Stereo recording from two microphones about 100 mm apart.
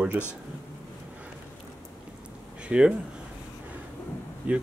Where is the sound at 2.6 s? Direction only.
10° right (ahead or behind).